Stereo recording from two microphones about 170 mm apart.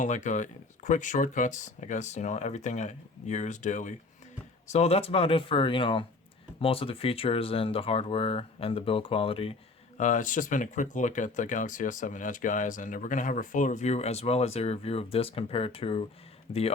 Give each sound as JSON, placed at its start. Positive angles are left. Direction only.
{"t": 0.0, "sound": "speech", "side_deg": 45}
{"t": 10.0, "sound": "speech", "side_deg": 50}